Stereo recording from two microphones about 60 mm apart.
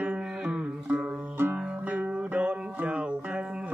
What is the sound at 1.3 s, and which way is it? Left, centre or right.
Music, right.